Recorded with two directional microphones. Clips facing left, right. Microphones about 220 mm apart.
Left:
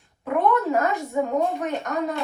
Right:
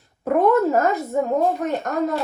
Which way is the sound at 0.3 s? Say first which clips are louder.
Right 4 dB; 45° right (ahead or behind).